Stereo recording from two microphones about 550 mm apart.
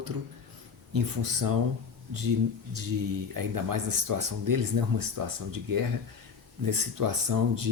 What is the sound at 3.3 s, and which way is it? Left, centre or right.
Speech, right.